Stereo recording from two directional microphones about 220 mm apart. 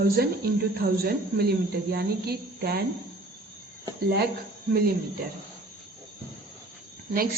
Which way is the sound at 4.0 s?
45° right (ahead or behind).